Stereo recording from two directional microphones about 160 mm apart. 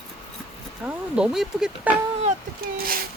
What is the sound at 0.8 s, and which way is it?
Speech, 5° right (ahead or behind).